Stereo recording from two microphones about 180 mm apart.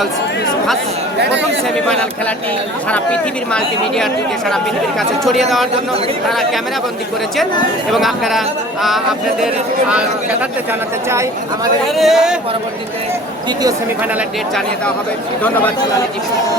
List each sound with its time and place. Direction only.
1.2 s speech: 70° right (ahead or behind)
2.9 s speech: 5° left (ahead or behind)
7.9 s speech: centre (ahead or behind)
11.9 s speech: centre (ahead or behind)